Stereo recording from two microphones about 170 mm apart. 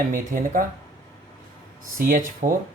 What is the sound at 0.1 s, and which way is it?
Speech, 55° right (ahead or behind).